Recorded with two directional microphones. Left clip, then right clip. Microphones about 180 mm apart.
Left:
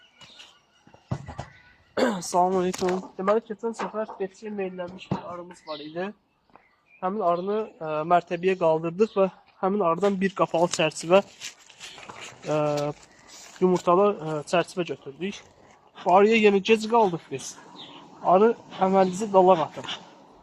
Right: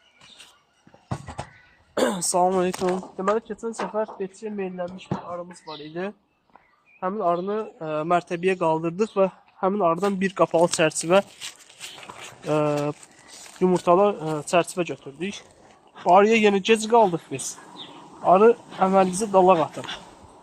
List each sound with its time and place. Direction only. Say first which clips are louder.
1.0 s a sound: right 3 dB; 40° right (ahead or behind)
2.0 s speech: right 1 dB; 60° right (ahead or behind)
4.5 s speech: right 2 dB; 45° right (ahead or behind); by 11.3 s 60° right (ahead or behind)
11.3 s dog: right 2 dB; 25° right (ahead or behind)
12.5 s speech: right 2 dB; 55° right (ahead or behind); by 18.5 s 75° right (ahead or behind)
18.8 s speech: even; 85° right
19.2 s speech: even; 70° right (ahead or behind)